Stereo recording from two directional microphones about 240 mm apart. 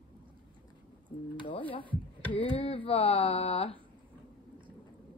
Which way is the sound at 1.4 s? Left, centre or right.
Left.